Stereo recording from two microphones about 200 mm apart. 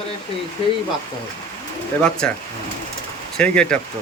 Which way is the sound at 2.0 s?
5° left (ahead or behind).